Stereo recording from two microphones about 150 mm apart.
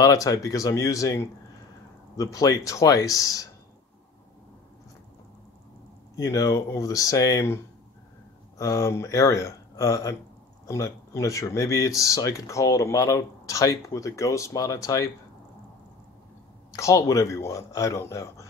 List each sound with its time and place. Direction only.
0.0 s speech: 25° left (ahead or behind)
6.1 s speech: 20° left (ahead or behind)
16.7 s speech: 20° left (ahead or behind)